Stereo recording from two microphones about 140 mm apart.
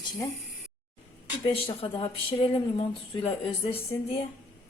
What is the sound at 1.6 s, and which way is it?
Speech, 40° left (ahead or behind).